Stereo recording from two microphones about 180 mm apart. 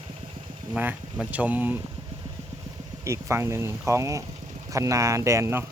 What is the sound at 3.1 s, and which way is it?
Speech, 15° right (ahead or behind).